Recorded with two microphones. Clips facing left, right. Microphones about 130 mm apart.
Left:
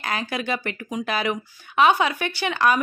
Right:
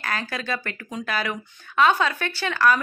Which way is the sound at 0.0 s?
20° left (ahead or behind).